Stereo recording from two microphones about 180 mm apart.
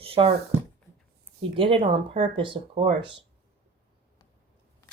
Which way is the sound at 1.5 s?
30° right (ahead or behind).